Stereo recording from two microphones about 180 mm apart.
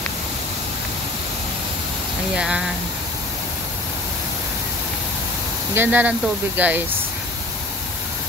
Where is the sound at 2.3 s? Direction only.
5° right (ahead or behind).